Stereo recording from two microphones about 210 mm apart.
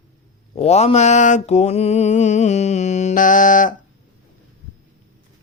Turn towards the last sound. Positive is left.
turn(degrees=40)  # may be behind; listen again after turning